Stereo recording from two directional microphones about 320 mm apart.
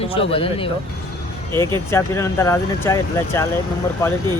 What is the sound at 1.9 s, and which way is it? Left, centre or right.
Speech, centre.